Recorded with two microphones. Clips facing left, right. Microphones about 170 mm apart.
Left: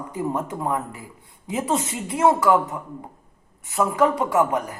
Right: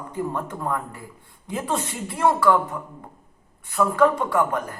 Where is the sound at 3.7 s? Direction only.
20° left (ahead or behind).